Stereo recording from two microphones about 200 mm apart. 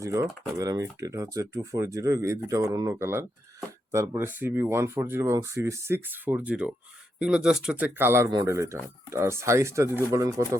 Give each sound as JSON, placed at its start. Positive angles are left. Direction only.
{"t": 0.0, "sound": "speech", "side_deg": -15}